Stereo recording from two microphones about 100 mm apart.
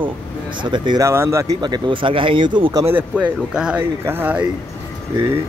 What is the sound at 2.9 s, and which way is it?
Speech, 15° right (ahead or behind).